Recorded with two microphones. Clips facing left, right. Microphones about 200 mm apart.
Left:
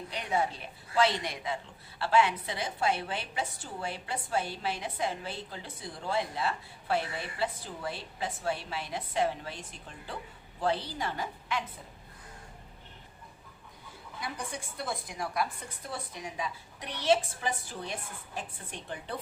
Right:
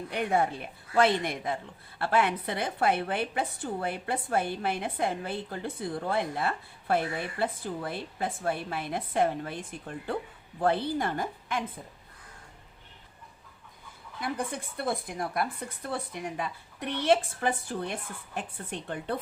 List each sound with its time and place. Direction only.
0.1 s a woman's voice: 55° right (ahead or behind)
14.2 s a woman's voice: 55° right (ahead or behind)